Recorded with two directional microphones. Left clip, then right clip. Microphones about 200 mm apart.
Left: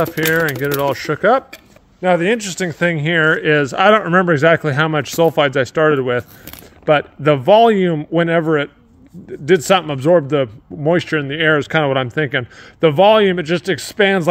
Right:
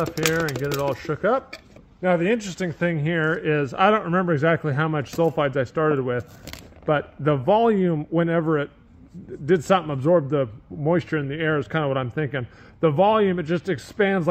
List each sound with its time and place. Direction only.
0.7 s a man's voice: 60° left (ahead or behind); by 14.3 s 40° left (ahead or behind)